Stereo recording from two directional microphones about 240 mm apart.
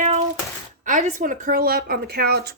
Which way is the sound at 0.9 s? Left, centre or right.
Right.